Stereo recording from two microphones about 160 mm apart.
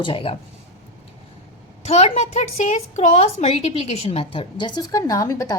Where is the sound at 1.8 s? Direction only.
45° left (ahead or behind).